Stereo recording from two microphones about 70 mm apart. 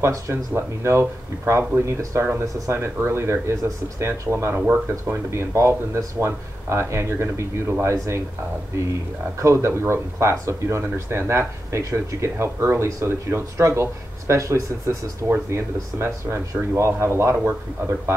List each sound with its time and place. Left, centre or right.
0.0 s speech: right